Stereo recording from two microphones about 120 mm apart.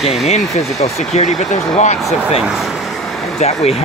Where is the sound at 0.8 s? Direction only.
60° left (ahead or behind).